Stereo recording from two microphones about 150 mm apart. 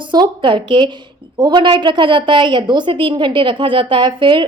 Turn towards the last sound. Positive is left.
turn(degrees=-35)  # may be behind; listen again after turning